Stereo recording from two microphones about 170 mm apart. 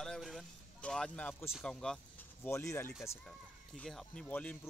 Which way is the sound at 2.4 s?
15° left (ahead or behind).